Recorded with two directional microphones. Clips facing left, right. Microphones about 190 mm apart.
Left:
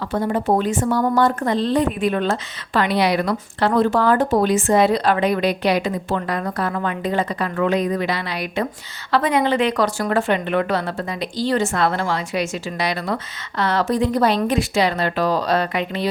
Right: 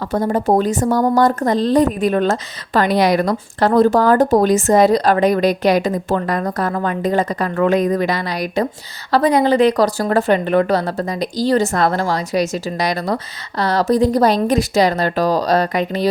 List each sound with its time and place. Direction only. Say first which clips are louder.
0.1 s a woman's voice: right 3 dB; 40° right (ahead or behind)